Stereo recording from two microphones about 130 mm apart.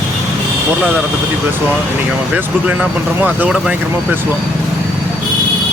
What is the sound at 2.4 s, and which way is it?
Speech, 15° right (ahead or behind).